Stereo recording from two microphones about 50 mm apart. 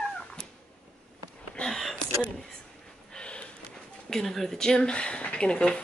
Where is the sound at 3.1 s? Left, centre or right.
Centre.